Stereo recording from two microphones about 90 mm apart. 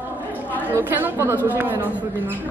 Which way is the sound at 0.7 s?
25° right (ahead or behind).